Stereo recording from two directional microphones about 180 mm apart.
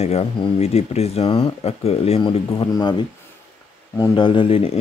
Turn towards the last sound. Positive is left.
turn(degrees=30)  # may be behind; listen again after turning